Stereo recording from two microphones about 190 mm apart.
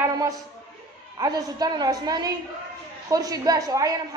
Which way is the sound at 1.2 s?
20° right (ahead or behind).